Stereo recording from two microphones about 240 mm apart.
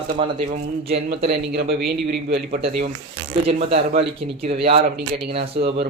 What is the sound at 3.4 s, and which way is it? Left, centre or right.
Speech, right.